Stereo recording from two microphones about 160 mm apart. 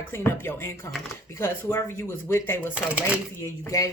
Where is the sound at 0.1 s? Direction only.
15° left (ahead or behind).